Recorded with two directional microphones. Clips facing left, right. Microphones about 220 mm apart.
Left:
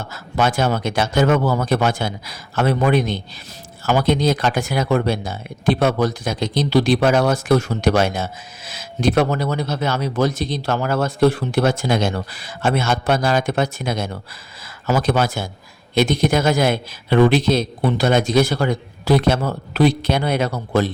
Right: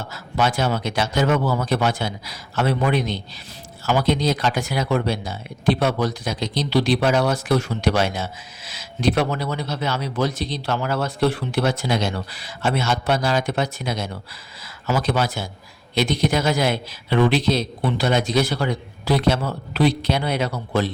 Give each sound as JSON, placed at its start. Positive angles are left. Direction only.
{"t": 0.1, "sound": "speech", "side_deg": 50}